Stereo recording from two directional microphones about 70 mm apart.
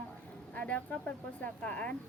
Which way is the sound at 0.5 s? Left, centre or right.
Left.